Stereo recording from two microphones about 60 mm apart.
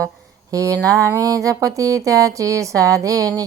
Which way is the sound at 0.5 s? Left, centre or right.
Right.